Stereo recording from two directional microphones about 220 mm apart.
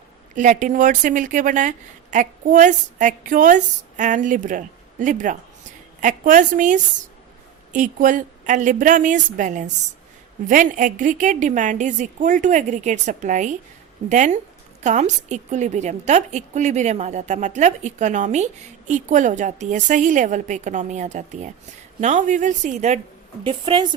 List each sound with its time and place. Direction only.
0.3 s a woman's voice: 35° right (ahead or behind)